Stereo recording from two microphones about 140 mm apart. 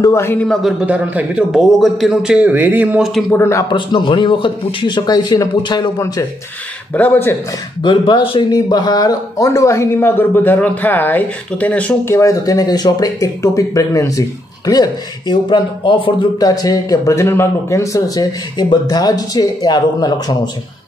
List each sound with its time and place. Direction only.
0.0 s a man's voice: 20° left (ahead or behind)
0.5 s a man's voice: centre (ahead or behind)
3.3 s a man's voice: 20° left (ahead or behind)
3.7 s a man's voice: 35° left (ahead or behind)
6.9 s speech: 15° left (ahead or behind)
7.8 s a man's voice: 35° left (ahead or behind)